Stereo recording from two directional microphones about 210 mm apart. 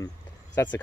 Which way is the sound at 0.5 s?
10° left (ahead or behind).